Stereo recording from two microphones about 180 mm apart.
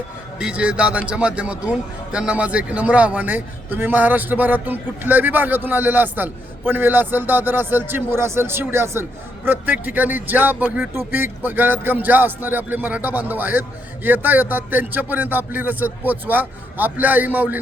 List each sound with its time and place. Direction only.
0.3 s a man's voice: 5° right (ahead or behind)